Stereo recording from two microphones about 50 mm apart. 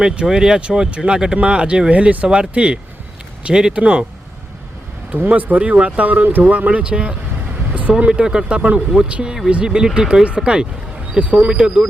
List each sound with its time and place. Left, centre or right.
0.0 s speech: centre
5.3 s speech: right